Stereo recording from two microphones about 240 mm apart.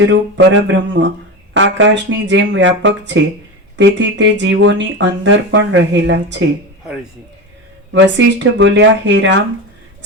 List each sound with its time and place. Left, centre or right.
0.0 s speech: right
7.9 s speech: right